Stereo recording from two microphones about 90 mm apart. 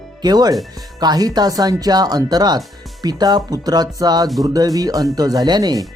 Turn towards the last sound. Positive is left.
turn(degrees=-45)  # may be behind; listen again after turning